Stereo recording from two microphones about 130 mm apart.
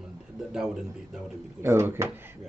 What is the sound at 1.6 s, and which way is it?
Speech, 20° right (ahead or behind).